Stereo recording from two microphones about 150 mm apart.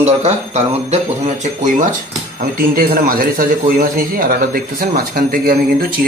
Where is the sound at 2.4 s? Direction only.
70° right (ahead or behind).